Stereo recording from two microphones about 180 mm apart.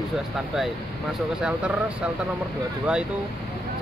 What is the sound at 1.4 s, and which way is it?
Speech, 5° right (ahead or behind).